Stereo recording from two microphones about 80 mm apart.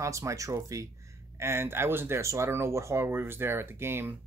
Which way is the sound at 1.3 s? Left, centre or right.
Right.